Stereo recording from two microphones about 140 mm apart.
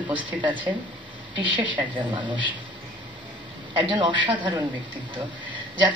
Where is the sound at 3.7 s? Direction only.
35° right (ahead or behind).